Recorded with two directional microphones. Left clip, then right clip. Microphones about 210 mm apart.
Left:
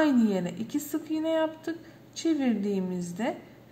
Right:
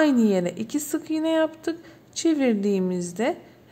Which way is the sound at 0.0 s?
55° right (ahead or behind).